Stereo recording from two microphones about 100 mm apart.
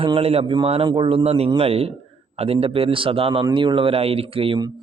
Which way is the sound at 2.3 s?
85° right.